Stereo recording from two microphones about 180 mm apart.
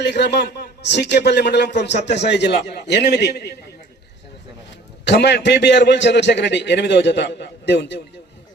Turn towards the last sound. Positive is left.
turn(degrees=75)  # may be behind; listen again after turning